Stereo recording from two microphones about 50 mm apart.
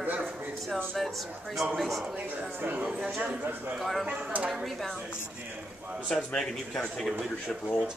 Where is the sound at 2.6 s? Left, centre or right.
Right.